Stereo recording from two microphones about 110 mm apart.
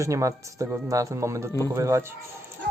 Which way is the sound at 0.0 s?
30° right (ahead or behind).